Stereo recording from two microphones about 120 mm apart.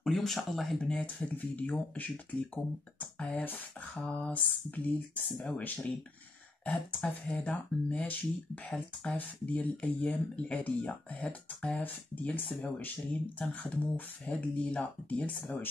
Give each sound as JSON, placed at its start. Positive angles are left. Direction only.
{"t": 0.0, "sound": "speech", "side_deg": 0}